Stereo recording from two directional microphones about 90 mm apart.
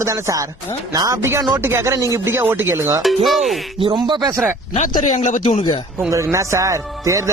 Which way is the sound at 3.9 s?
55° right (ahead or behind).